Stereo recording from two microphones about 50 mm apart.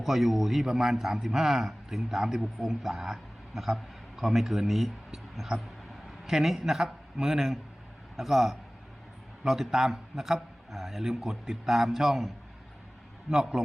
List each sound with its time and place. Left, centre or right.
0.0 s a man's voice: centre
13.3 s a man's voice: centre